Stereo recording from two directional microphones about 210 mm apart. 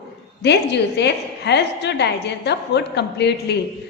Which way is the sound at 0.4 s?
55° left (ahead or behind).